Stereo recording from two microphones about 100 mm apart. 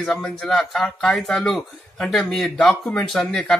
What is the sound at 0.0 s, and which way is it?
A man's voice, 5° left (ahead or behind).